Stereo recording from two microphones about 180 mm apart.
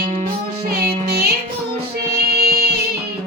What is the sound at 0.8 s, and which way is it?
Music, 60° right (ahead or behind).